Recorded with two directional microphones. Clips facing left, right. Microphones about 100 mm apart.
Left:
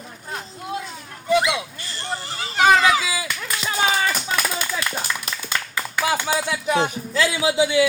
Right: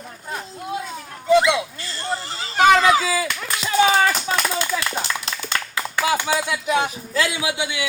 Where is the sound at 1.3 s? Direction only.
20° right (ahead or behind).